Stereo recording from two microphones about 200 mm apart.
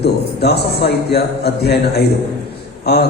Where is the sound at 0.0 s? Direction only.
55° left (ahead or behind).